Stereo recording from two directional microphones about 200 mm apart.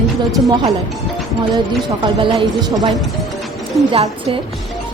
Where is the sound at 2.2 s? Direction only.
25° right (ahead or behind).